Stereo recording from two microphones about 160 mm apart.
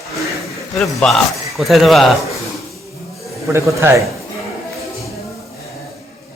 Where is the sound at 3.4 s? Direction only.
15° right (ahead or behind).